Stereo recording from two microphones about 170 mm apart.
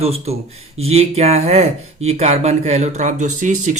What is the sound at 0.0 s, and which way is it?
Speech, 35° right (ahead or behind).